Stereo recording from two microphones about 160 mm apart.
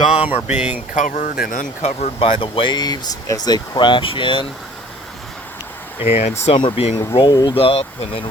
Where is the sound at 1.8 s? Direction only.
40° left (ahead or behind).